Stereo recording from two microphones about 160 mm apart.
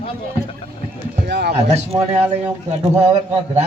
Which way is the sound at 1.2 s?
90° right.